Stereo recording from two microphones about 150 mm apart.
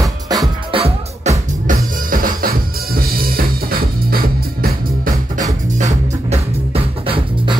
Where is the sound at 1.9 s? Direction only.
65° right (ahead or behind).